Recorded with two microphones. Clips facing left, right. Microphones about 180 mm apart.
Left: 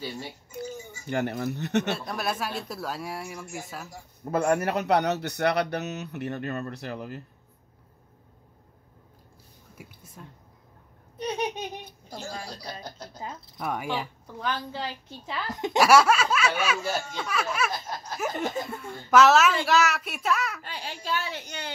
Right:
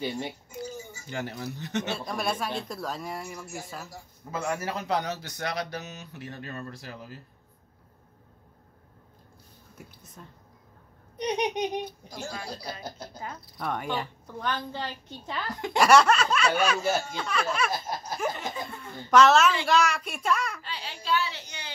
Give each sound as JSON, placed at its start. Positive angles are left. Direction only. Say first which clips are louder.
{"t": 1.0, "sound": "a man's voice", "louder": "left 7 dB", "side_deg": 60}
{"t": 2.0, "sound": "a woman's voice", "louder": "even", "side_deg": 5}
{"t": 4.2, "sound": "a man's voice", "louder": "left 7 dB", "side_deg": 55}
{"t": 9.8, "sound": "speech", "louder": "left 1 dB", "side_deg": 10}
{"t": 11.1, "sound": "speech", "louder": "right 2 dB", "side_deg": -20}
{"t": 13.6, "sound": "a woman's voice", "louder": "left 1 dB", "side_deg": 10}
{"t": 15.4, "sound": "a woman's voice", "louder": "left 3 dB", "side_deg": 20}
{"t": 15.8, "sound": "a sound", "louder": "even", "side_deg": 5}
{"t": 17.2, "sound": "a woman's voice", "louder": "even", "side_deg": 5}
{"t": 17.6, "sound": "a sound", "louder": "right 2 dB", "side_deg": -10}
{"t": 18.3, "sound": "a woman's voice", "louder": "left 6 dB", "side_deg": 45}
{"t": 18.6, "sound": "a woman's voice", "louder": "left 4 dB", "side_deg": 5}
{"t": 20.6, "sound": "a woman's voice", "louder": "even", "side_deg": 50}